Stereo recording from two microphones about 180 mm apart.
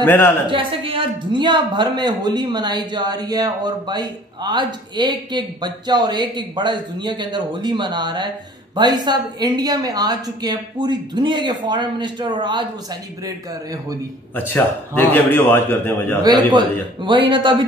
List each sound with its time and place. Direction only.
0.0 s a man's voice: 10° left (ahead or behind)
0.5 s a woman's voice: 30° right (ahead or behind)
14.3 s a man's voice: 10° left (ahead or behind)
17.0 s a woman's voice: 25° right (ahead or behind)